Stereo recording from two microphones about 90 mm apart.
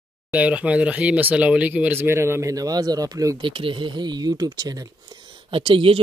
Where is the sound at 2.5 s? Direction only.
45° right (ahead or behind).